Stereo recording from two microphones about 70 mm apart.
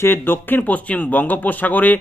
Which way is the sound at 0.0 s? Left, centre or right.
Left.